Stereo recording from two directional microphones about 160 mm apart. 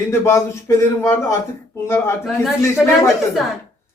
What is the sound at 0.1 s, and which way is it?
A man's voice, 15° left (ahead or behind).